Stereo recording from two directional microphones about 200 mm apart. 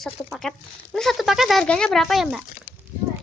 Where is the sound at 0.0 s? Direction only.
Centre (ahead or behind).